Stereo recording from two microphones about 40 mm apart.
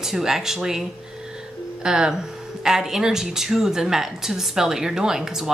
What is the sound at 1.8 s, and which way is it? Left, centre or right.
A woman's voice, centre.